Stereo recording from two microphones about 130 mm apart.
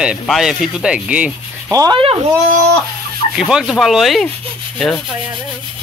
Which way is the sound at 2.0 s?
45° right (ahead or behind).